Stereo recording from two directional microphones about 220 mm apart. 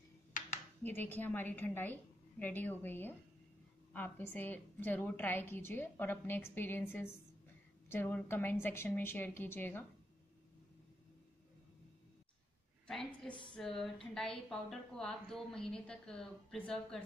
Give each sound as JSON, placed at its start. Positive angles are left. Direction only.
{"t": 0.8, "sound": "a woman's voice", "side_deg": 10}
{"t": 12.8, "sound": "a woman's voice", "side_deg": 0}
{"t": 13.3, "sound": "speech", "side_deg": 20}
{"t": 13.6, "sound": "a woman's voice", "side_deg": 0}